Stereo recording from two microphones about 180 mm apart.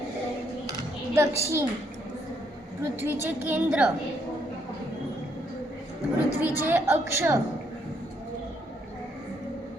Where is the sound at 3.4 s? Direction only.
10° right (ahead or behind).